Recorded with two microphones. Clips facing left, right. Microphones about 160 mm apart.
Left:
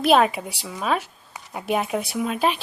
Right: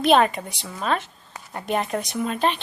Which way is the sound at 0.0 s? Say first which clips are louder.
Even; 5° left (ahead or behind).